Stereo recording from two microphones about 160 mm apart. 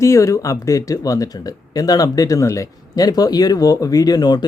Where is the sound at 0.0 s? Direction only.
20° left (ahead or behind).